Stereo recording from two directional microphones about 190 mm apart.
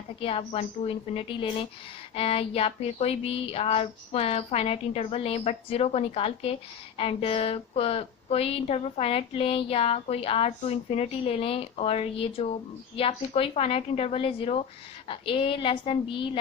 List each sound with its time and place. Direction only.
0.2 s a woman's voice: 30° left (ahead or behind)